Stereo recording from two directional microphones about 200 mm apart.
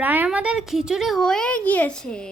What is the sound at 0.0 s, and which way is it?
Speech, 10° right (ahead or behind).